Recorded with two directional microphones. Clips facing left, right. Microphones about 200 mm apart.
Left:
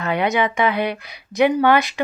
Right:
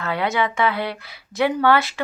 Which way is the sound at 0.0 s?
20° left (ahead or behind).